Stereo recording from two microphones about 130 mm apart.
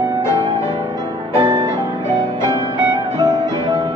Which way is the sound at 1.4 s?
30° right (ahead or behind).